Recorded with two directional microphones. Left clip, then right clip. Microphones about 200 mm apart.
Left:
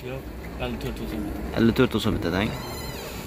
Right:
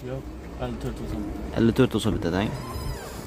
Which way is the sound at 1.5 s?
20° right (ahead or behind).